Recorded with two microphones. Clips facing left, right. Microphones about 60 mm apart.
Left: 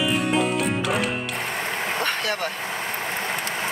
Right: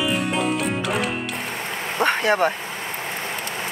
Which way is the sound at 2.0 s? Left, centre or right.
Right.